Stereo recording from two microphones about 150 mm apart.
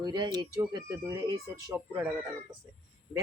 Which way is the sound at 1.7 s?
15° right (ahead or behind).